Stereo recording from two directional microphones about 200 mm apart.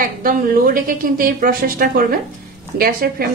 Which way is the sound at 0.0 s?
45° right (ahead or behind).